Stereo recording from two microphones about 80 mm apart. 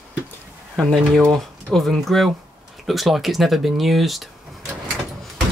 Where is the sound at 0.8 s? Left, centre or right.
Centre.